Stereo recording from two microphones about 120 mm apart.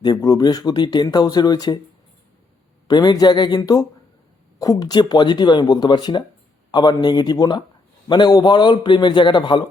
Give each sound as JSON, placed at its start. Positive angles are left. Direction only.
{"t": 0.0, "sound": "speech", "side_deg": 35}
{"t": 2.8, "sound": "speech", "side_deg": 35}